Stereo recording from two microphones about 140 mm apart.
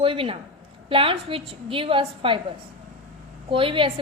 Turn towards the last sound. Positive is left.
turn(degrees=-40)  # may be behind; listen again after turning